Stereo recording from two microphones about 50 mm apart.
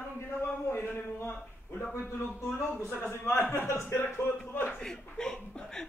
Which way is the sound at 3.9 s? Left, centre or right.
Left.